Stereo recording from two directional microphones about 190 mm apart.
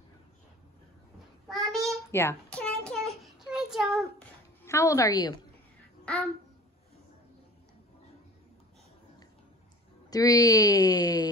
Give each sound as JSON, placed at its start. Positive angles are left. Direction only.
{"t": 1.5, "sound": "child singing", "side_deg": 0}
{"t": 2.0, "sound": "a sound", "side_deg": 15}
{"t": 4.6, "sound": "a woman's voice", "side_deg": 15}
{"t": 6.1, "sound": "babbling", "side_deg": 5}
{"t": 10.0, "sound": "speech", "side_deg": 20}